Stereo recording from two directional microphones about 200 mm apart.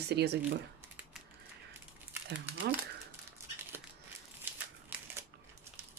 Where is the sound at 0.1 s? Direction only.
55° right (ahead or behind).